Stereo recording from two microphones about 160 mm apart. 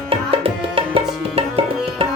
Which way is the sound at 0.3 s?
35° right (ahead or behind).